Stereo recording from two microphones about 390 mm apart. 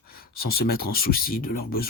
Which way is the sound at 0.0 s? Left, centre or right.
Left.